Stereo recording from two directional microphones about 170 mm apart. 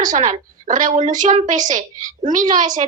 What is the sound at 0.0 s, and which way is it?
A woman's voice, 45° right (ahead or behind).